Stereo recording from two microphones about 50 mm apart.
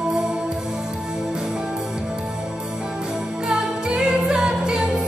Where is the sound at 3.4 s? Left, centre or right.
Centre.